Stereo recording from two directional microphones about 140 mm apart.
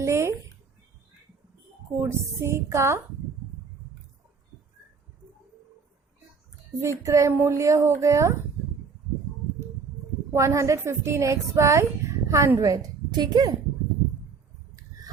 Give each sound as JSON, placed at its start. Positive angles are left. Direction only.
{"t": 0.0, "sound": "speech", "side_deg": -20}
{"t": 2.0, "sound": "speech", "side_deg": -20}
{"t": 6.8, "sound": "speech", "side_deg": -20}
{"t": 10.3, "sound": "speech", "side_deg": -20}